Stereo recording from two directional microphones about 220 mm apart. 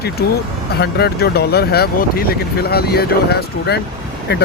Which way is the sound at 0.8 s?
45° left (ahead or behind).